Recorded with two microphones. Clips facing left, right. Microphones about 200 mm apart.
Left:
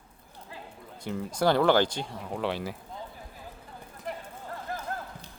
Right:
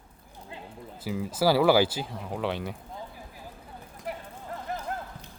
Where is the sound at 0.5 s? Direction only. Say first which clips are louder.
Right 2 dB; 25° right (ahead or behind).